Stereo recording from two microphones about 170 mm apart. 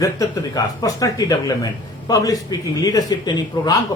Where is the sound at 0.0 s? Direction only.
20° left (ahead or behind).